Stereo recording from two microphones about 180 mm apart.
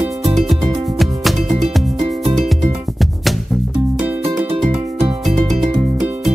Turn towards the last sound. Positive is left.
turn(degrees=-30)  # may be behind; listen again after turning